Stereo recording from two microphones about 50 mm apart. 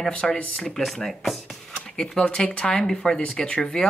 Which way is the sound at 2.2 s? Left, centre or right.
Centre.